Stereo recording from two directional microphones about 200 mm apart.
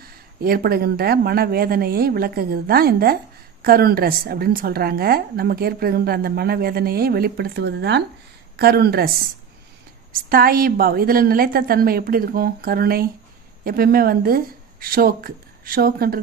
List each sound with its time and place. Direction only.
0.0 s a woman's voice: 50° right (ahead or behind)
10.1 s a woman's voice: 45° right (ahead or behind)